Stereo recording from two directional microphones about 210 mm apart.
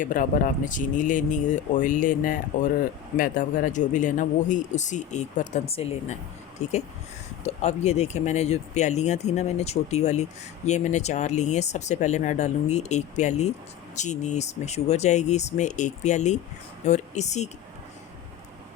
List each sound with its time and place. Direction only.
0.0 s speech: 40° left (ahead or behind)